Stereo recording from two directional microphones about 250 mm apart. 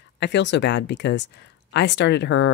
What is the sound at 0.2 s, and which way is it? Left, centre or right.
Speech, left.